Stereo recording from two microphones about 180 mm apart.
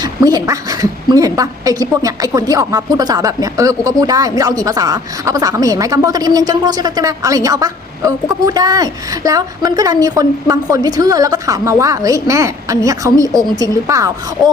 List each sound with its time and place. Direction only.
0.0 s a woman's voice: 20° right (ahead or behind)